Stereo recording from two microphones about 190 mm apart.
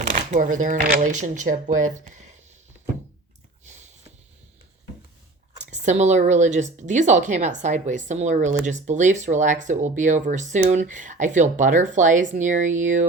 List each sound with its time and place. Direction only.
0.3 s speech: 45° right (ahead or behind)
5.5 s speech: 40° right (ahead or behind)